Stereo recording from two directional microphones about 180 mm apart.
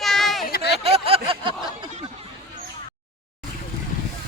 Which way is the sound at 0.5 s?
65° left (ahead or behind).